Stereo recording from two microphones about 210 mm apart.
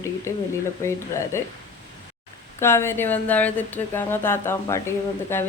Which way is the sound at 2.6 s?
10° left (ahead or behind).